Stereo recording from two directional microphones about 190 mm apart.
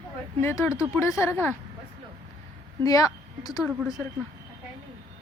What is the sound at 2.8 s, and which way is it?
Speech, 20° left (ahead or behind).